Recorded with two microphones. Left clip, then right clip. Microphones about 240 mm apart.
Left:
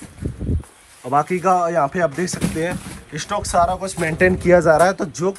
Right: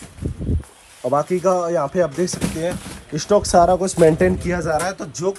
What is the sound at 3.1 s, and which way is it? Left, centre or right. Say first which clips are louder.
Speech: right 4 dB; right.